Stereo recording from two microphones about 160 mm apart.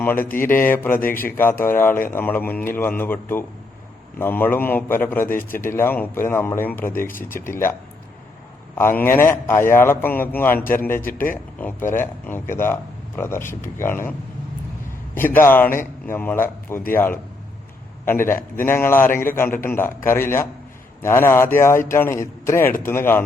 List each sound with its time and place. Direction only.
0.0 s speech: 10° left (ahead or behind)
11.9 s a man's voice: 15° left (ahead or behind)